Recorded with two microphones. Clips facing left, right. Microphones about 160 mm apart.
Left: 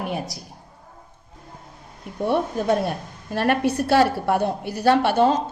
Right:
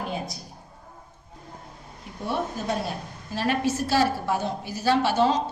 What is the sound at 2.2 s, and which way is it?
A woman's voice, 55° left (ahead or behind).